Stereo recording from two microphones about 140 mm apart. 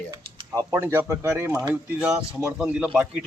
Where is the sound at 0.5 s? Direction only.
20° right (ahead or behind).